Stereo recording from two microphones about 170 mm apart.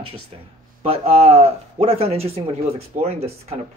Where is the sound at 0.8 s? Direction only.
35° right (ahead or behind).